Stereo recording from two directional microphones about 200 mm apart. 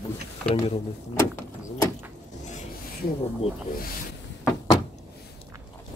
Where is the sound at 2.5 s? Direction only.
35° left (ahead or behind).